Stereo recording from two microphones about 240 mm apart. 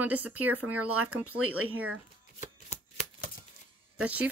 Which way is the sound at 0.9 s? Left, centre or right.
Right.